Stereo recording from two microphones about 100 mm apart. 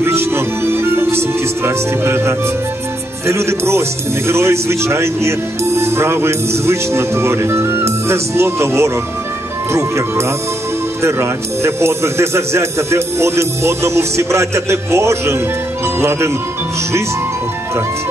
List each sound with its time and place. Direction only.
0.0 s music: 25° right (ahead or behind)
3.3 s speech: 25° right (ahead or behind)